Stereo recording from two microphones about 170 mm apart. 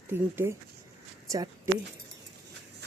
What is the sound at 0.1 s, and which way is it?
Speech, 15° right (ahead or behind).